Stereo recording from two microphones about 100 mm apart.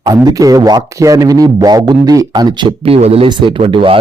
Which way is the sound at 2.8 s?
85° right.